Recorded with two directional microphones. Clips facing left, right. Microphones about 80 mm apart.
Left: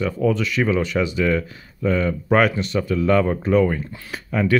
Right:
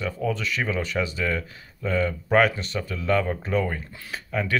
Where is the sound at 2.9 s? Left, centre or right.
Left.